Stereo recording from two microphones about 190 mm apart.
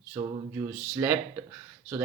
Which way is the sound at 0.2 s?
20° right (ahead or behind).